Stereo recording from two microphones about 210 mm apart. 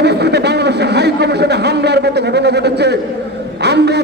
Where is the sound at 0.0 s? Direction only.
50° right (ahead or behind).